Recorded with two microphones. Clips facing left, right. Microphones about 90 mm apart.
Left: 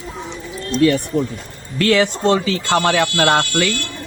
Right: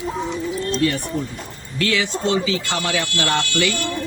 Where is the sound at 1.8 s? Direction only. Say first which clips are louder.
Left 6 dB; 45° left (ahead or behind).